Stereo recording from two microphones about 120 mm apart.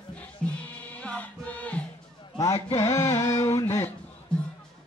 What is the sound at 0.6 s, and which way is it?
Music, 10° left (ahead or behind).